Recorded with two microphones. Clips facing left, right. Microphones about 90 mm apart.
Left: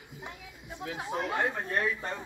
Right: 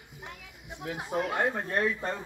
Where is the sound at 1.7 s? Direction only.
35° right (ahead or behind).